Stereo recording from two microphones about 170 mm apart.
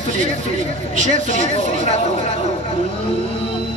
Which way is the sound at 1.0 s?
45° right (ahead or behind).